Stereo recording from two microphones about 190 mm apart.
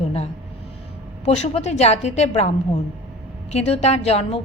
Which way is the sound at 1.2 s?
35° left (ahead or behind).